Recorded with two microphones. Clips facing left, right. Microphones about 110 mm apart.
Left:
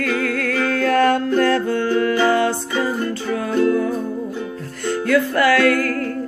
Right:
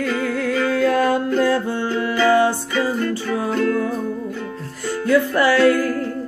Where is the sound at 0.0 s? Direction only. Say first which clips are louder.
Even; 15° right (ahead or behind).